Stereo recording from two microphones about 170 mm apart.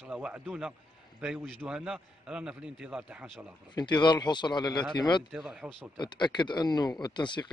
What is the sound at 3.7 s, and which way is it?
Speech, 25° left (ahead or behind).